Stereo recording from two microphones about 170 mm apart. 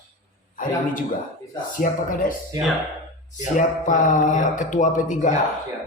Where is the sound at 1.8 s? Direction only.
55° left (ahead or behind).